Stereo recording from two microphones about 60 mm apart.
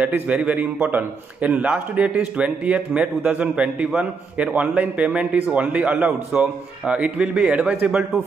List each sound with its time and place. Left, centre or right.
0.0 s a man's voice: right
6.3 s a man's voice: centre